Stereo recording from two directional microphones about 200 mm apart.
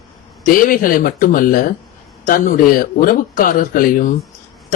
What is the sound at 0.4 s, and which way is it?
A man's voice, 45° left (ahead or behind).